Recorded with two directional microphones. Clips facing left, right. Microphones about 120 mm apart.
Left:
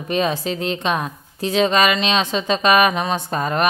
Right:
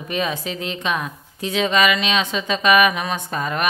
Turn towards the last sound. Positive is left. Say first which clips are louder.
# left 3 dB
turn(degrees=35)  # may be behind; listen again after turning